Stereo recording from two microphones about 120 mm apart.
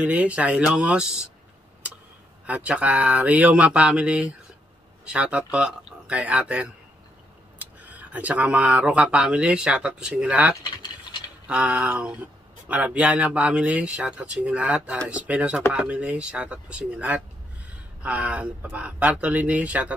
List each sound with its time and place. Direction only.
0.0 s speech: 10° right (ahead or behind)
2.4 s speech: 10° right (ahead or behind)
10.6 s a sound: 40° left (ahead or behind)
11.4 s speech: 10° right (ahead or behind)